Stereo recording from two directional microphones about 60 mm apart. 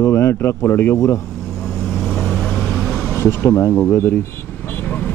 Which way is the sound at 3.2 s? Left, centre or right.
Left.